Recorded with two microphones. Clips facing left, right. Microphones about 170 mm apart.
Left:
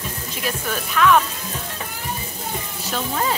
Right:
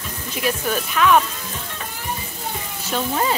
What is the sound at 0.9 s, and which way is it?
Speech, 10° right (ahead or behind).